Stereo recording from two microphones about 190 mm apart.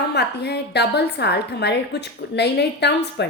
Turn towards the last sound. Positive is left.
turn(degrees=60)  # may be behind; listen again after turning